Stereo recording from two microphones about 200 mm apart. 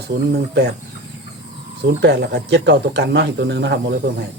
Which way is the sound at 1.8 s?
60° right (ahead or behind).